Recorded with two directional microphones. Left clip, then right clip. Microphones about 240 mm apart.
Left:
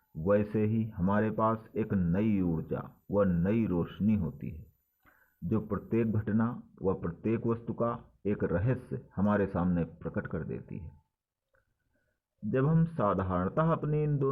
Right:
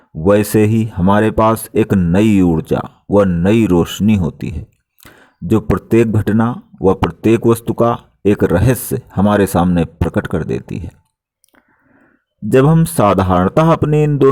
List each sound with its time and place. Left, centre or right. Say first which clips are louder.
0.3 s speech: right 17 dB; right
12.5 s speech: right 19 dB; right